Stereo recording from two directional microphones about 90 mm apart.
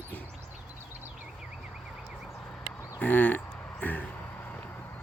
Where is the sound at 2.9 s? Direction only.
20° left (ahead or behind).